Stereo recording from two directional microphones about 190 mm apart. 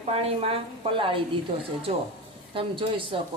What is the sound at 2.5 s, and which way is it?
Speech, 25° right (ahead or behind).